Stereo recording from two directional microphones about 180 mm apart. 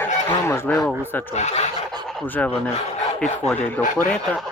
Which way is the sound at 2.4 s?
5° left (ahead or behind).